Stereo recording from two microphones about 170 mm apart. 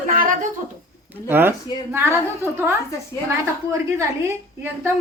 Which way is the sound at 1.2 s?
10° right (ahead or behind).